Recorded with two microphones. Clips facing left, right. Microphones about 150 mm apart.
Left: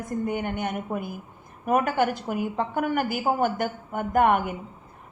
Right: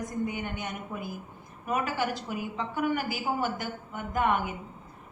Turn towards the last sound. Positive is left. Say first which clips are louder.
# left 6 dB
turn(degrees=55)  # may be behind; listen again after turning